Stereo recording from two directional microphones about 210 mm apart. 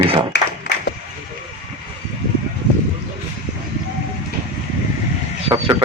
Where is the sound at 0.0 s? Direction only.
25° right (ahead or behind).